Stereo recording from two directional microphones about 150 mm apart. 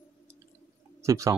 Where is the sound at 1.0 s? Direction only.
20° right (ahead or behind).